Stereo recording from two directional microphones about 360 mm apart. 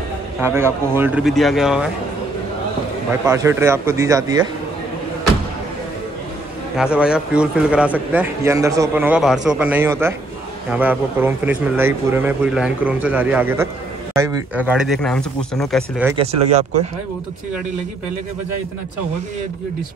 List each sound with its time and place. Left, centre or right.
0.4 s a man's voice: centre
3.3 s speech: centre
6.8 s a man's voice: centre
16.2 s speech: centre